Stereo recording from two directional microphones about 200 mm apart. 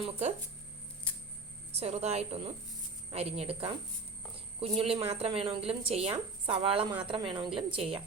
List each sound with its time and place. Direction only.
0.0 s a woman's voice: 35° right (ahead or behind)
1.7 s a woman's voice: 30° right (ahead or behind)